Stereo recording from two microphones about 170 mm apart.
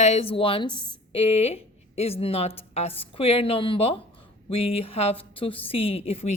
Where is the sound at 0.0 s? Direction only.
40° left (ahead or behind).